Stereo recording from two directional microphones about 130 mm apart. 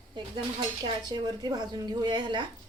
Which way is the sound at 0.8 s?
35° right (ahead or behind).